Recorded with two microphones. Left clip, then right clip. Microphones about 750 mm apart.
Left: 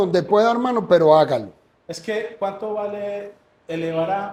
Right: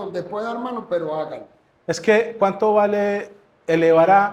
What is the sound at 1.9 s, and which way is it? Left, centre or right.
Speech, right.